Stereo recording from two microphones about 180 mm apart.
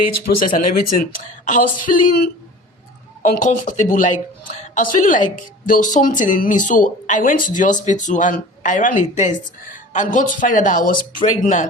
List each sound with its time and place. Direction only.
0.3 s speech: 55° left (ahead or behind)
3.2 s speech: 45° left (ahead or behind)